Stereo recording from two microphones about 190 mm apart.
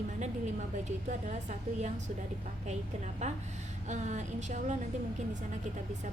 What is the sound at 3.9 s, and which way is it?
Speech, 40° right (ahead or behind).